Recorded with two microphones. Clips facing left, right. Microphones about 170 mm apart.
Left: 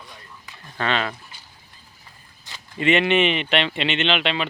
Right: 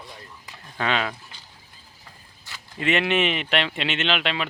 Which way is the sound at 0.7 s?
5° right (ahead or behind).